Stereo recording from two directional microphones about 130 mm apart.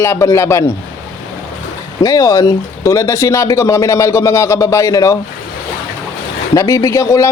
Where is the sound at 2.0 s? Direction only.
25° left (ahead or behind).